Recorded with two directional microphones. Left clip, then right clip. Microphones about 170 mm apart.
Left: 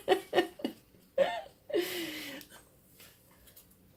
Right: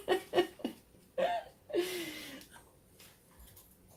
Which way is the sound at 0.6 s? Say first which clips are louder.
Left 3 dB; 45° left (ahead or behind).